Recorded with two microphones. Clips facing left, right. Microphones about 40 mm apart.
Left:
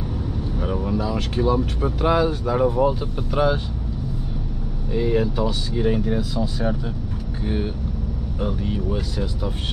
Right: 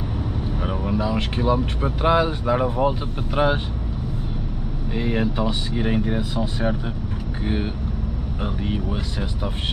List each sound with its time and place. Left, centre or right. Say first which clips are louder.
0.6 s speech: left 1 dB; right
4.9 s speech: left 2 dB; right